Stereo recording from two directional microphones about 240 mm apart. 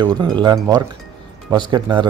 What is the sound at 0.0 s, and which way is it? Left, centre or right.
A man's voice, centre.